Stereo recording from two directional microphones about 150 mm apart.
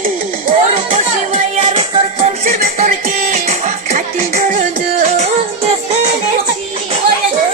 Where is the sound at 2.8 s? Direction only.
50° right (ahead or behind).